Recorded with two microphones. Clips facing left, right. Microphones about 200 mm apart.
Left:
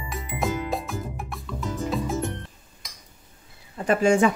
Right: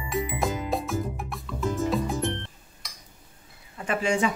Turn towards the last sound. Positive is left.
turn(degrees=45)  # may be behind; listen again after turning